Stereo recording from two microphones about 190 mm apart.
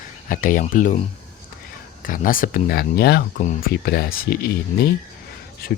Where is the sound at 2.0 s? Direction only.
45° left (ahead or behind).